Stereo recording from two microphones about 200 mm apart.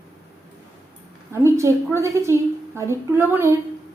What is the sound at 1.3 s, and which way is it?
A woman's voice, 15° right (ahead or behind).